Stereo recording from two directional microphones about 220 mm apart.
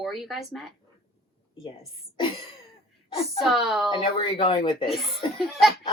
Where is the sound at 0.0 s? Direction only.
Centre (ahead or behind).